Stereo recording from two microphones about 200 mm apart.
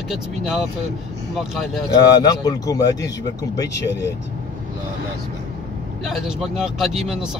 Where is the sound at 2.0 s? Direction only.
20° left (ahead or behind).